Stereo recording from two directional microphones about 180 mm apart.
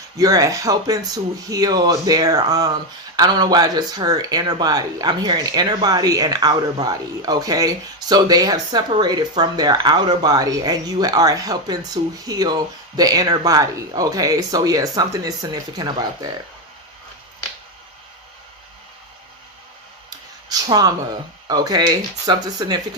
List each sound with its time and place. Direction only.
0.2 s speech: 20° right (ahead or behind)
20.1 s a sound: 20° right (ahead or behind)
21.4 s speech: 20° right (ahead or behind)